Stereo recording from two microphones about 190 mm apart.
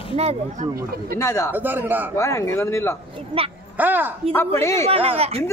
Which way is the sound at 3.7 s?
10° right (ahead or behind).